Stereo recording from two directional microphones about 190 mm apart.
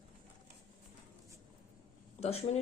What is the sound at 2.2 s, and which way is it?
Speech, 35° left (ahead or behind).